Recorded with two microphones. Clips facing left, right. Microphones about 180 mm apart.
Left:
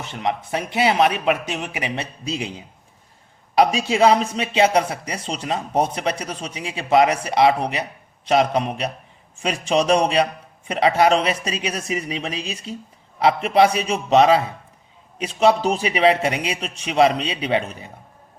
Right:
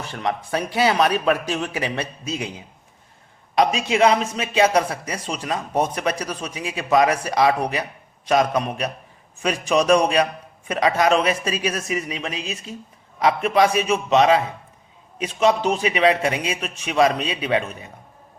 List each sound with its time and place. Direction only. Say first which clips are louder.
0.0 s speech: left 1 dB; 20° left (ahead or behind)
2.2 s a man's voice: left 1 dB; 30° left (ahead or behind)
3.8 s a man's voice: left 1 dB; 30° left (ahead or behind)